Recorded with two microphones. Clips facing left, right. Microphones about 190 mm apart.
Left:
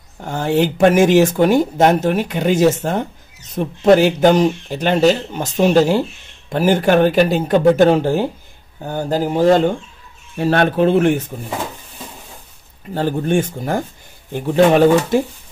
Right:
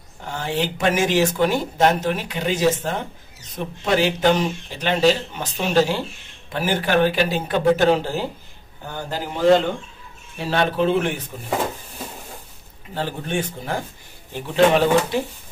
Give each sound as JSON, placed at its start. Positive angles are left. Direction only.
{"t": 0.2, "sound": "speech", "side_deg": 45}
{"t": 8.8, "sound": "speech", "side_deg": 45}
{"t": 10.3, "sound": "speech", "side_deg": 55}
{"t": 12.9, "sound": "speech", "side_deg": 45}